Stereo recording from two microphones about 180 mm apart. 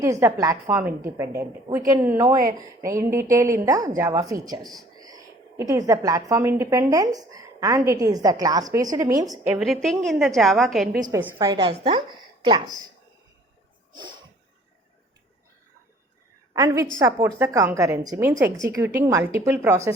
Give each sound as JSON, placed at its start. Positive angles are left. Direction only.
{"t": 0.0, "sound": "a woman's voice", "side_deg": -15}
{"t": 9.6, "sound": "a woman's voice", "side_deg": 0}
{"t": 11.1, "sound": "a woman's voice", "side_deg": -20}
{"t": 13.9, "sound": "a sound", "side_deg": -25}
{"t": 16.6, "sound": "a woman's voice", "side_deg": -15}